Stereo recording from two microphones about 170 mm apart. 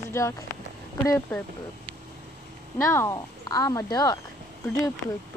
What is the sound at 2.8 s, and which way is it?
Speech, 15° left (ahead or behind).